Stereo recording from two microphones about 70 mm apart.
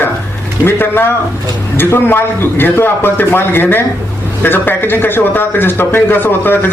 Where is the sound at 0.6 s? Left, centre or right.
Left.